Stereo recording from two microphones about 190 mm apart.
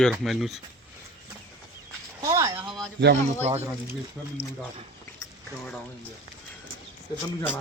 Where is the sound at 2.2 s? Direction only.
15° right (ahead or behind).